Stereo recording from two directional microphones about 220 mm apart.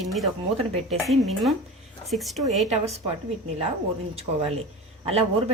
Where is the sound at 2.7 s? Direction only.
30° right (ahead or behind).